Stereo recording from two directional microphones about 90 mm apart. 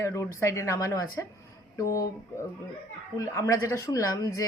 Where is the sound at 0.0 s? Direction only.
30° left (ahead or behind).